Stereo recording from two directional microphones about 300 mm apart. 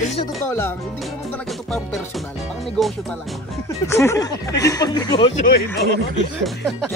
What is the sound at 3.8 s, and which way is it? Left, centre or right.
Speech, centre.